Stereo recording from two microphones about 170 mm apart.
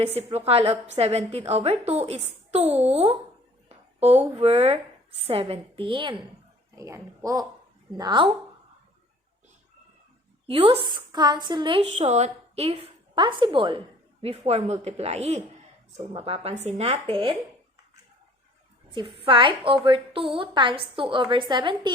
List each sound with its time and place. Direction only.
0.0 s a woman's voice: 35° right (ahead or behind)
3.7 s a sound: 40° right (ahead or behind)
4.4 s a woman's voice: 35° right (ahead or behind)
6.7 s a woman's voice: 20° right (ahead or behind)
10.4 s a woman's voice: 35° right (ahead or behind)
18.9 s a woman's voice: 35° right (ahead or behind)